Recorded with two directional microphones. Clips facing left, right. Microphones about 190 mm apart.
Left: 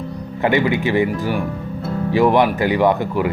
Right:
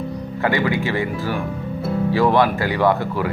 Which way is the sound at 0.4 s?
20° left (ahead or behind).